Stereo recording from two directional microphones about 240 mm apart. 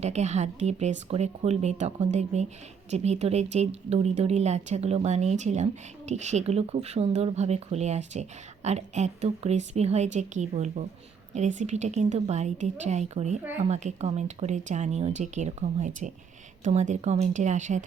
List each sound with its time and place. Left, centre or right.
0.0 s speech: right